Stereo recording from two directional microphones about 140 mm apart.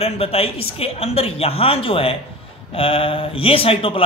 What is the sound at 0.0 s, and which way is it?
A man's voice, 45° left (ahead or behind).